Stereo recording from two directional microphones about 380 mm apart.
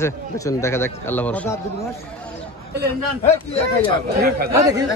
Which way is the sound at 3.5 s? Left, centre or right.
Right.